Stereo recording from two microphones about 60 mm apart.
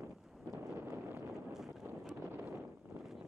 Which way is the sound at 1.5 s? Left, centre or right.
Centre.